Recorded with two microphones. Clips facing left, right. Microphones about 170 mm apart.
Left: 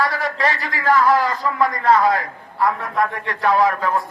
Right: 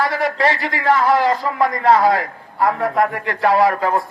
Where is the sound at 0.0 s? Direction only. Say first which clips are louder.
Right 3 dB; 25° right (ahead or behind).